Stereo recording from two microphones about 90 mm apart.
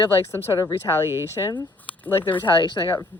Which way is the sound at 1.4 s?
50° left (ahead or behind).